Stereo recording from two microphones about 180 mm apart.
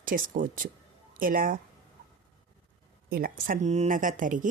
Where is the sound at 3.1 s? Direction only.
50° right (ahead or behind).